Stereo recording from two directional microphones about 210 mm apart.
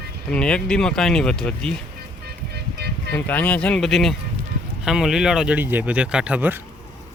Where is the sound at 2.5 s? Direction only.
50° right (ahead or behind).